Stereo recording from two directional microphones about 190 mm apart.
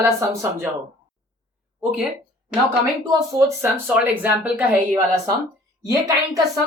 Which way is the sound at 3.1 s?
10° right (ahead or behind).